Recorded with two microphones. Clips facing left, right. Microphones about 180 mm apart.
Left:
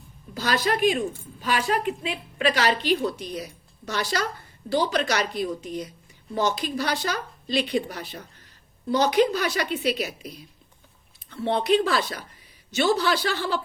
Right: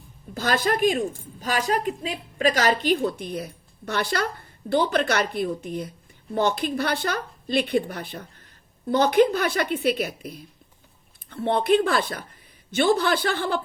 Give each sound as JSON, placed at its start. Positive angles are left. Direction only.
{"t": 0.3, "sound": "a woman's voice", "side_deg": -50}